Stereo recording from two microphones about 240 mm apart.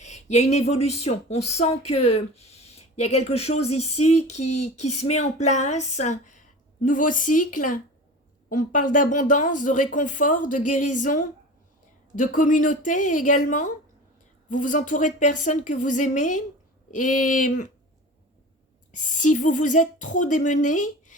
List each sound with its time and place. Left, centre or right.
0.0 s speech: left
18.9 s speech: left